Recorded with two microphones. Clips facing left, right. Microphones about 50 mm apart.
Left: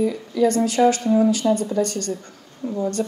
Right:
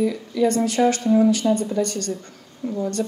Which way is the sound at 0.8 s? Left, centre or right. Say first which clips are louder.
Left 2 dB; centre.